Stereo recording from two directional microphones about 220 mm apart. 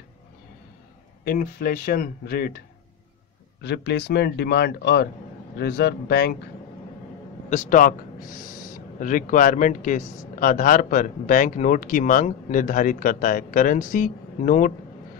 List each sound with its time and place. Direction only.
1.2 s a man's voice: 40° left (ahead or behind)
3.6 s a man's voice: 50° left (ahead or behind)
7.4 s speech: 35° left (ahead or behind)